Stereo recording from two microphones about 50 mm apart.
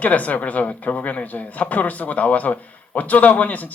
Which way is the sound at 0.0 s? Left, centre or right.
Left.